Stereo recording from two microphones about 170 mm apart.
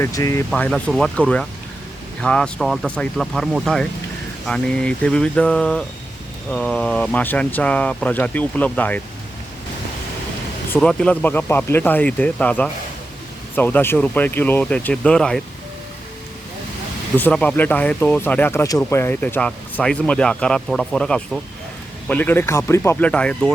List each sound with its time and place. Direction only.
0.0 s speech: 20° left (ahead or behind)
0.5 s speech: 5° left (ahead or behind)
2.2 s speech: 5° left (ahead or behind)
10.8 s speech: 5° left (ahead or behind)
17.2 s speech: 10° left (ahead or behind)